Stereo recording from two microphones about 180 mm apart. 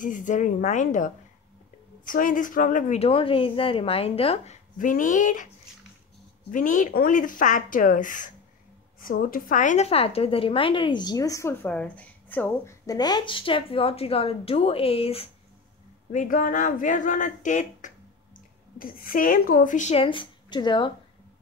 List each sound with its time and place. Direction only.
0.0 s a woman's voice: 45° left (ahead or behind)
4.7 s speech: 45° left (ahead or behind)
6.5 s a woman's voice: 45° left (ahead or behind)
16.1 s speech: 45° left (ahead or behind); by 20.9 s 25° left (ahead or behind)